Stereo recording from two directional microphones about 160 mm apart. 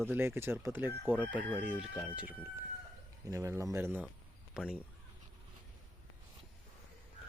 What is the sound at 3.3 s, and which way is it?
Speech, 20° right (ahead or behind).